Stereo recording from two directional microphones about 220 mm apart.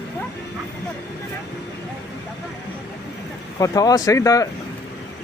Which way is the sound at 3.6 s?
15° left (ahead or behind).